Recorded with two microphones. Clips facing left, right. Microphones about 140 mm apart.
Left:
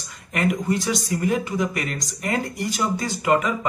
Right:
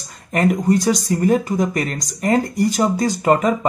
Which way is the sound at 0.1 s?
35° right (ahead or behind).